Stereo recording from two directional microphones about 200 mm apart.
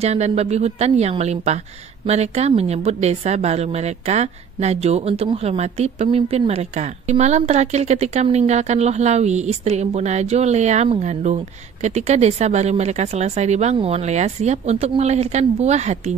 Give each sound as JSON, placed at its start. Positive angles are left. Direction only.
{"t": 0.0, "sound": "a woman's voice", "side_deg": -35}